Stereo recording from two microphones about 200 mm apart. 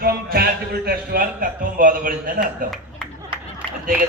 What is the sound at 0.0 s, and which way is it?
A man's voice, 50° right (ahead or behind).